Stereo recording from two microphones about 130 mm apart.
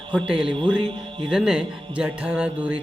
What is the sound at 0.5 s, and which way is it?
Music, 40° right (ahead or behind).